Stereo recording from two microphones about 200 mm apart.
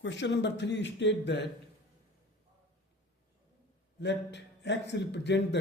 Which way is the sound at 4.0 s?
60° left (ahead or behind).